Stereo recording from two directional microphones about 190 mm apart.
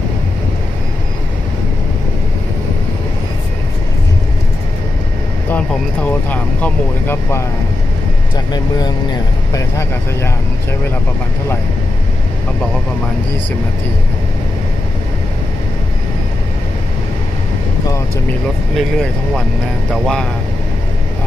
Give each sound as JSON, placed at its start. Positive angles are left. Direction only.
{"t": 5.5, "sound": "speech", "side_deg": 10}
{"t": 8.5, "sound": "speech", "side_deg": 20}
{"t": 18.8, "sound": "speech", "side_deg": 5}